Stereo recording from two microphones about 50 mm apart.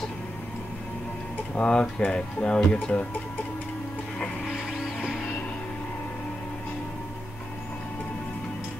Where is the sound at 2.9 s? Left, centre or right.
Left.